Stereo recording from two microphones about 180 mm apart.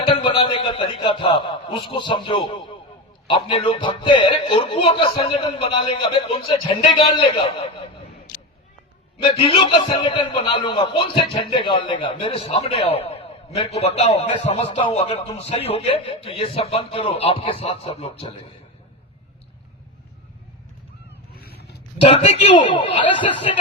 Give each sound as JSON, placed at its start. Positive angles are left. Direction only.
{"t": 0.1, "sound": "chuckle", "side_deg": 30}
{"t": 3.2, "sound": "a man's voice", "side_deg": 30}
{"t": 9.1, "sound": "a man's voice", "side_deg": 30}
{"t": 21.3, "sound": "a sound", "side_deg": 60}
{"t": 22.0, "sound": "a man's voice", "side_deg": 30}